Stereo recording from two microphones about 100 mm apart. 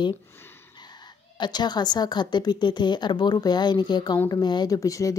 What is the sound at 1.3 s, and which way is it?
A woman's voice, 45° left (ahead or behind).